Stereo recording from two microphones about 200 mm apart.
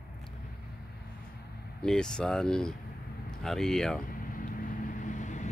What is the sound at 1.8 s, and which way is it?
Speech, 5° left (ahead or behind).